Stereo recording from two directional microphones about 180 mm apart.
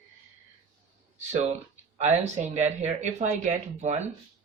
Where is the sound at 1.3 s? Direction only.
40° right (ahead or behind).